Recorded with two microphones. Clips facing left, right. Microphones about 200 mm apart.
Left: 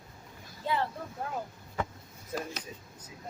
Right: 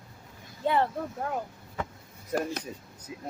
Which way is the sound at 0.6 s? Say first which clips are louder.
Right 6 dB; 60° right (ahead or behind).